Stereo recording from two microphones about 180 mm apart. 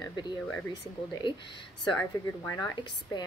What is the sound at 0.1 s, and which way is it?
Speech, 25° left (ahead or behind).